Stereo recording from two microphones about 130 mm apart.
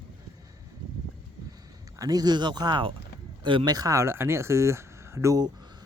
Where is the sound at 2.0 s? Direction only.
30° right (ahead or behind).